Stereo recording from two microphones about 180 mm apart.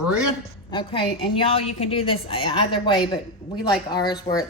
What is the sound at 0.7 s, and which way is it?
A woman's voice, 25° left (ahead or behind).